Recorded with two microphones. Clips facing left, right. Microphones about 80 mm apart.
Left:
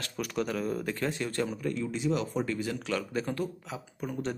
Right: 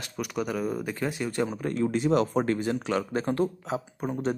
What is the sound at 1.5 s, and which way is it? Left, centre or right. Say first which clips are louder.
A man's voice: right 5 dB; right.